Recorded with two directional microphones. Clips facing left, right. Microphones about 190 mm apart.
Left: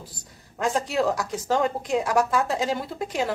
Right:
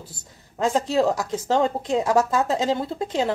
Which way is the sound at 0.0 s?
25° right (ahead or behind).